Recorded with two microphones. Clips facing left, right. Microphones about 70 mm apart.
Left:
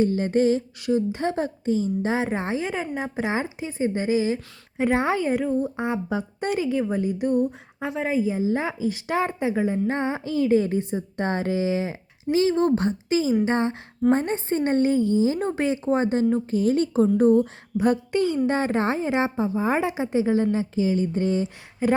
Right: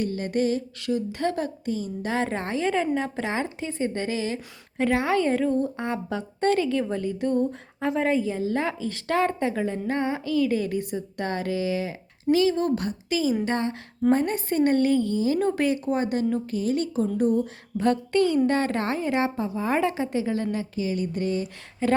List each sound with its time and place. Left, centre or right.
0.0 s a woman's voice: left
17.7 s a woman's voice: centre
21.8 s speech: centre